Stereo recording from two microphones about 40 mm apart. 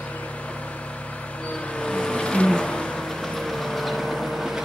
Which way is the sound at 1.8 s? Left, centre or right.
Left.